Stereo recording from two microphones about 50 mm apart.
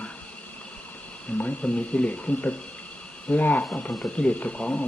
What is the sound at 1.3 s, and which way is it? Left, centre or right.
Speech, left.